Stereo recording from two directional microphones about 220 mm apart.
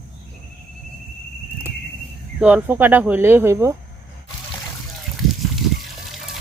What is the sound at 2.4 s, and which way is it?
Speech, 5° right (ahead or behind).